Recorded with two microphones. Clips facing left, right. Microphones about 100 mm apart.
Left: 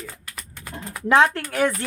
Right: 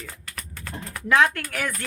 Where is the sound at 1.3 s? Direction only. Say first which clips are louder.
Left 8 dB; 30° left (ahead or behind).